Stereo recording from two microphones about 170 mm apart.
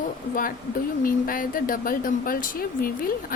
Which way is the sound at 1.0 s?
55° left (ahead or behind).